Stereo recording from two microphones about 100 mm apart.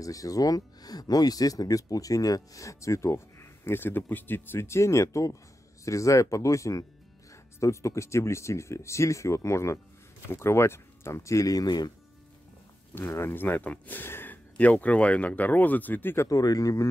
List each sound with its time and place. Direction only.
0.0 s speech: 35° left (ahead or behind)
12.9 s speech: 25° left (ahead or behind)
16.3 s speech: 35° left (ahead or behind)